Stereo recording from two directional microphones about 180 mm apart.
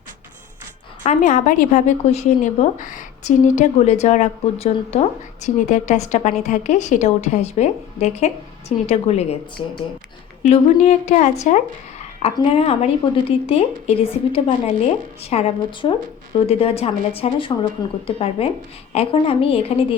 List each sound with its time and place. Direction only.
1.0 s a woman's voice: 45° left (ahead or behind)
10.5 s a woman's voice: 35° left (ahead or behind)